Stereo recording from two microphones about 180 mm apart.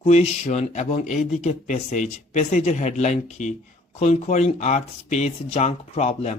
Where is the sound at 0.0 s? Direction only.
35° left (ahead or behind).